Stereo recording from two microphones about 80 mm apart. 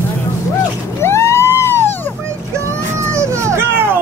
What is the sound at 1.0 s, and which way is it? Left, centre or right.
Vehicle, left.